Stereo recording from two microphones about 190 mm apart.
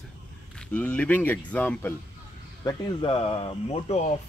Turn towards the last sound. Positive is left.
turn(degrees=35)  # may be behind; listen again after turning